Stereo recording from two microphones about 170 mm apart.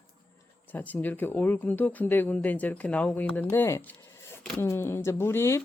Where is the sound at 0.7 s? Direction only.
10° left (ahead or behind).